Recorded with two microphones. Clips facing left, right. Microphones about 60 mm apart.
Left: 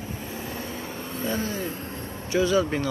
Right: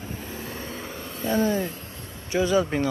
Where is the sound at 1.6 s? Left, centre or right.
Left.